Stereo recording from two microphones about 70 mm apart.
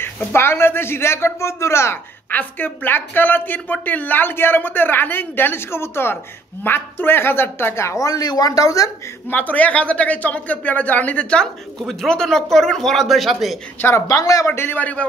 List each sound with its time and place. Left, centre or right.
0.0 s a man's voice: left
2.3 s a woman's voice: left
8.1 s speech: left
9.3 s a woman's voice: left
11.8 s speech: centre
13.7 s a man's voice: left
14.0 s speech: left
14.5 s a woman's voice: left